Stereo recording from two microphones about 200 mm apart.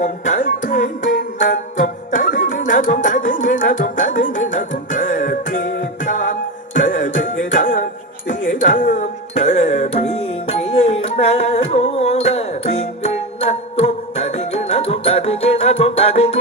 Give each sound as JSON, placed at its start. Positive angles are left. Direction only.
{"t": 0.0, "sound": "music", "side_deg": 40}